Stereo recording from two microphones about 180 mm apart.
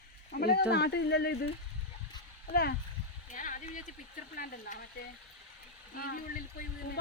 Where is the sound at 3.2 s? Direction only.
45° left (ahead or behind).